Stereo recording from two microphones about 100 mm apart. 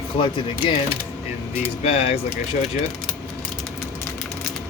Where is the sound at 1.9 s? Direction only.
90° left.